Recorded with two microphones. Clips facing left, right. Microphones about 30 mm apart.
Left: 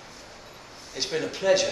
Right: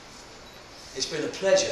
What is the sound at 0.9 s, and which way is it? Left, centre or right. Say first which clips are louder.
Speech: left 1 dB; centre.